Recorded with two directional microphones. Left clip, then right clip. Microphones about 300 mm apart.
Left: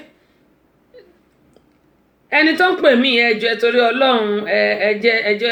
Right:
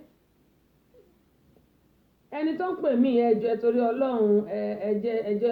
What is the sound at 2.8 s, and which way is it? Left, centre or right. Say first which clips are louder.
Speech: left 9 dB; centre.